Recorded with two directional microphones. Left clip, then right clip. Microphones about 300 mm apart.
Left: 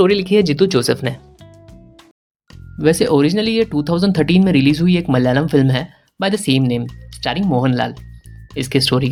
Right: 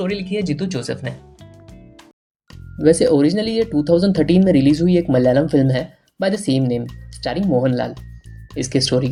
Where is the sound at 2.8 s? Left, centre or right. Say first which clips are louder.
Even; left.